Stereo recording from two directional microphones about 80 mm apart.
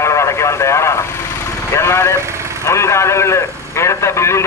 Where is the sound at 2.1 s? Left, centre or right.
Right.